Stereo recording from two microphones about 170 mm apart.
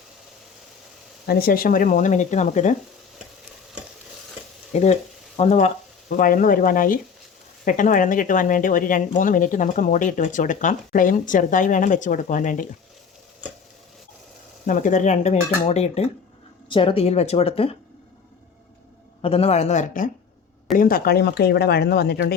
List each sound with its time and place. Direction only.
1.3 s speech: 60° left (ahead or behind); by 2.7 s 45° left (ahead or behind)
4.7 s frying: 40° left (ahead or behind)
5.4 s speech: 40° left (ahead or behind)
6.1 s speech: 55° left (ahead or behind)
14.7 s speech: 50° left (ahead or behind); by 17.7 s 35° left (ahead or behind)
19.2 s speech: 35° left (ahead or behind)
20.7 s speech: 60° left (ahead or behind)